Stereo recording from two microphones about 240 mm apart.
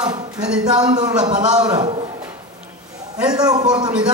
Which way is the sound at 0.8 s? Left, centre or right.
Centre.